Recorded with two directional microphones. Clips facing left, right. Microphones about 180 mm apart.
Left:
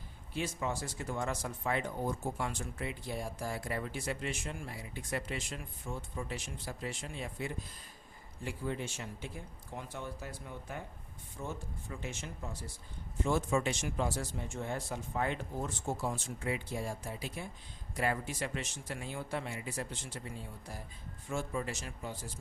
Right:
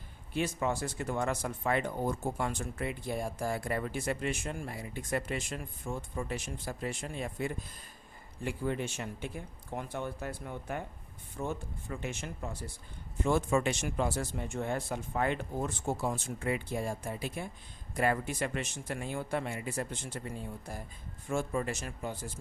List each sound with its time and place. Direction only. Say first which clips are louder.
0.3 s speech: right 4 dB; 60° right (ahead or behind)
8.4 s speech: right 4 dB; 60° right (ahead or behind)